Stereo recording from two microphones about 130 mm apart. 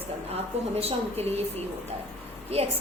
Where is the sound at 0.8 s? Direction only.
50° right (ahead or behind).